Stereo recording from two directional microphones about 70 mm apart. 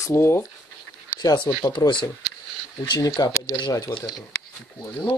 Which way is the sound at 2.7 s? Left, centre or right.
Left.